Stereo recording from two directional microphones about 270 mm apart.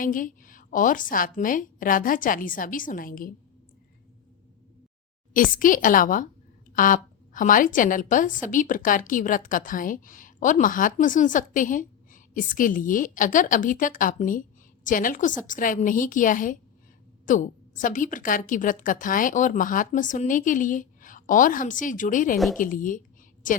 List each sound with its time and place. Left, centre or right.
0.0 s speech: left
5.3 s a woman's voice: left